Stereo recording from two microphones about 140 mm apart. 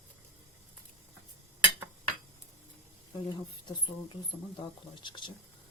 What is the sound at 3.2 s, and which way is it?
Speech, 35° left (ahead or behind).